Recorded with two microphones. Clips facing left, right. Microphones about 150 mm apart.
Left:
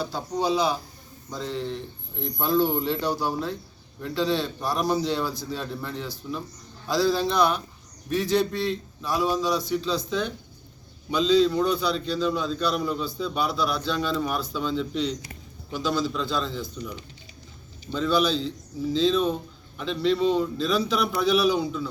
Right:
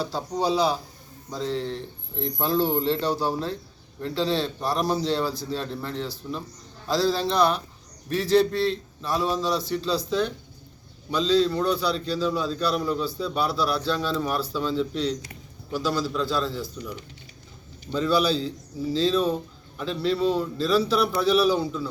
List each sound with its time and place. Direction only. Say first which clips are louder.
0.0 s speech: right 1 dB; 30° right (ahead or behind)
1.3 s speech: right 2 dB; centre (ahead or behind)
3.2 s speech: right 1 dB; 30° right (ahead or behind)
4.3 s speech: right 1 dB; centre (ahead or behind)
17.9 s speech: right 1 dB; 5° right (ahead or behind)